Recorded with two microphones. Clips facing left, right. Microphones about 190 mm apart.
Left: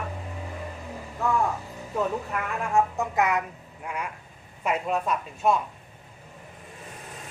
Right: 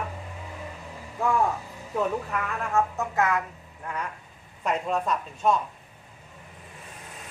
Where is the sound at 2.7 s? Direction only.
15° left (ahead or behind).